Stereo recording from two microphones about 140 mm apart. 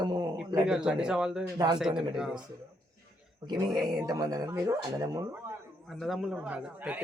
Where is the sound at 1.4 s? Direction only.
25° right (ahead or behind).